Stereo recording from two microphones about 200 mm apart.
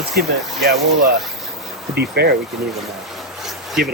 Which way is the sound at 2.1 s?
55° right (ahead or behind).